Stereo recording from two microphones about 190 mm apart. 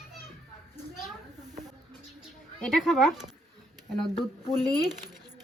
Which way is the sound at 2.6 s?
Centre (ahead or behind).